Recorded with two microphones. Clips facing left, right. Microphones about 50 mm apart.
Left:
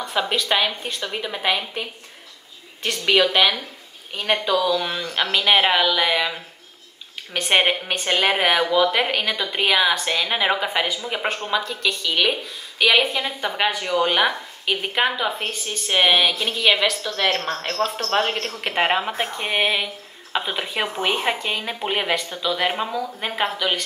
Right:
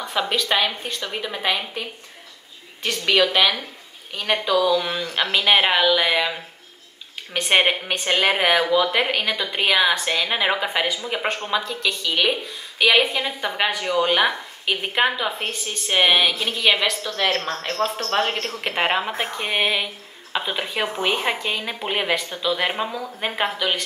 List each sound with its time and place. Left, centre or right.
0.1 s a woman's voice: centre
3.1 s a woman's voice: centre
7.6 s a woman's voice: centre
17.4 s speech: left
18.6 s a woman's voice: centre